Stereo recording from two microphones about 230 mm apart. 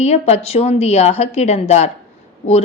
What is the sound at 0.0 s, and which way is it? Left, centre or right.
Speech, left.